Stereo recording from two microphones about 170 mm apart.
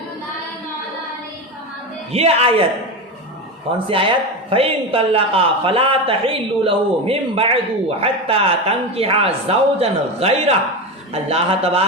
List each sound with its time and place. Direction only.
2.1 s speech: 35° right (ahead or behind)
3.8 s speech: 30° right (ahead or behind)